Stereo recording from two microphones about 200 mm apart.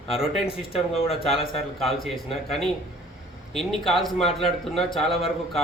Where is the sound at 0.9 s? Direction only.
30° left (ahead or behind).